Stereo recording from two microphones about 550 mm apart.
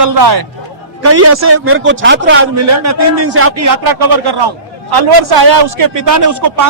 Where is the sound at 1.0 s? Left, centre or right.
Right.